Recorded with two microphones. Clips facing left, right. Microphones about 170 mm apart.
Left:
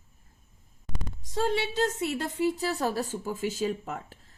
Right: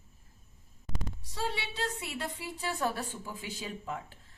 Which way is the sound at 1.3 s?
50° left (ahead or behind).